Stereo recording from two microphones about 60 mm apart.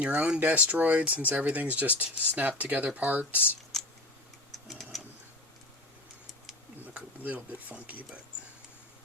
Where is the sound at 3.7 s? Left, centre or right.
Centre.